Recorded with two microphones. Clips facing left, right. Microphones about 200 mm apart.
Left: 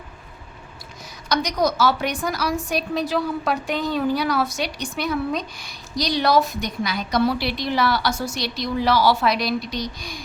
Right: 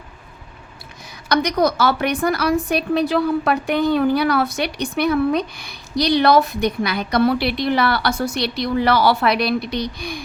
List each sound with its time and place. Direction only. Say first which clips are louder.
1.3 s a woman's voice: right 4 dB; 60° right (ahead or behind)